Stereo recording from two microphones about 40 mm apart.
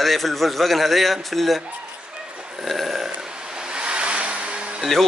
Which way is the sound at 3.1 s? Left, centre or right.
Centre.